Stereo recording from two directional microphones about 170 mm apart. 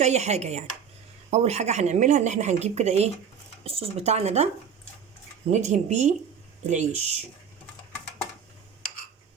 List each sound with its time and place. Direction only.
0.0 s a woman's voice: 40° right (ahead or behind)
5.5 s speech: 45° right (ahead or behind)